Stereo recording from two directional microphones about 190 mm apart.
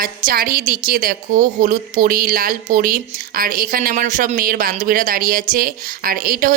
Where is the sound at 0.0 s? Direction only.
50° right (ahead or behind).